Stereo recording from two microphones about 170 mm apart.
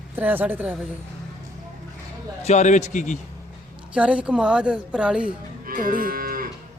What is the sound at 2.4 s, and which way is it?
Speech, 40° left (ahead or behind).